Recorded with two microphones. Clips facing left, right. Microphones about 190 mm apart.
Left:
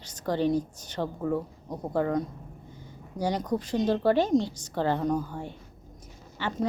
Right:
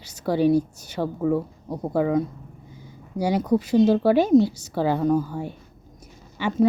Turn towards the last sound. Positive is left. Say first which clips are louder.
# right 9 dB
turn(degrees=-10)  # may be behind; listen again after turning